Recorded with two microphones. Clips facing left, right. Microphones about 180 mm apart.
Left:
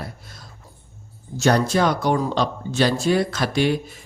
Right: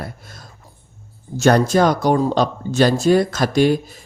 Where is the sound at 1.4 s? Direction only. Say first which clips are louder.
Right 4 dB; 50° right (ahead or behind).